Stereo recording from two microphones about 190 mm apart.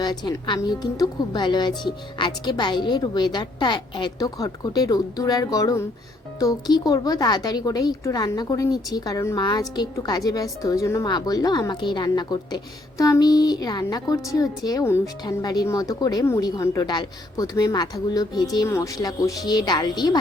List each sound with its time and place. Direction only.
0.0 s a woman's voice: 20° left (ahead or behind)